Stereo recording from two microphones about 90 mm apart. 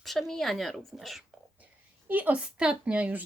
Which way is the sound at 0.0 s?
Centre (ahead or behind).